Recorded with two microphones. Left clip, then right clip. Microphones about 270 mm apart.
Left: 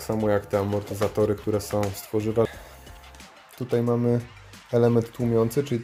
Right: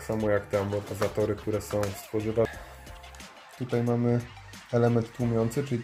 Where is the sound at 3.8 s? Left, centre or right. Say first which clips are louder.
Left 3 dB; centre.